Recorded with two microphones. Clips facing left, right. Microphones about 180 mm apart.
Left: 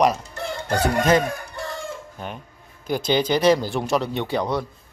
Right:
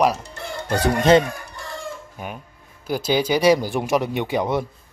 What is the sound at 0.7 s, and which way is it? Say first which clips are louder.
Chicken: right 3 dB; 25° right (ahead or behind).